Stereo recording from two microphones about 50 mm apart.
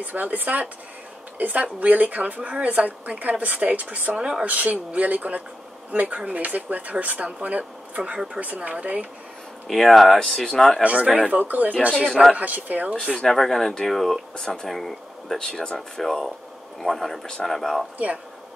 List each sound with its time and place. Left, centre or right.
0.0 s speech: right
4.5 s speech: right
9.7 s speech: centre
10.8 s speech: right
11.3 s speech: right
11.9 s speech: centre
12.4 s speech: right
13.1 s speech: centre
15.3 s speech: centre
17.9 s speech: right